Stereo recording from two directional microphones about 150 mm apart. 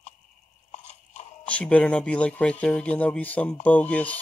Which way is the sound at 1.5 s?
10° left (ahead or behind).